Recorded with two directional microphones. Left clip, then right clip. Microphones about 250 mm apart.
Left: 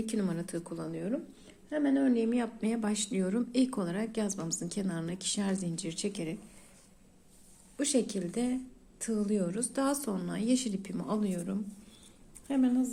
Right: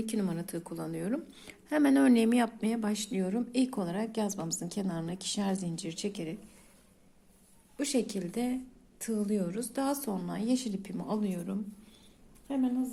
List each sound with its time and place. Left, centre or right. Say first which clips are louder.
0.0 s speech: even; centre
1.5 s speech: right 4 dB; right
2.6 s speech: even; centre
7.8 s speech: left 1 dB; centre